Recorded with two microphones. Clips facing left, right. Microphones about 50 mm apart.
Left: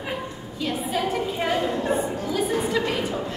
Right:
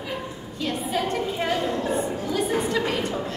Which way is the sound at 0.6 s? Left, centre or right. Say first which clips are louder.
Even; centre.